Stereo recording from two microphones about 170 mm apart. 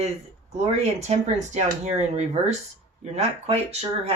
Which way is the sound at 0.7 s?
40° right (ahead or behind).